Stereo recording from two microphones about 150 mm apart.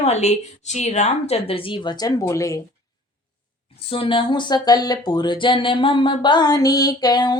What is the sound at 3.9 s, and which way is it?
Speech, 35° left (ahead or behind).